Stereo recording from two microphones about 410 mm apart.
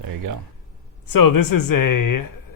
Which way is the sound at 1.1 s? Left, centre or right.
Left.